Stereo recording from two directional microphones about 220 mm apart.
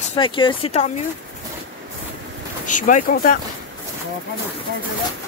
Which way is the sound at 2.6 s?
35° left (ahead or behind).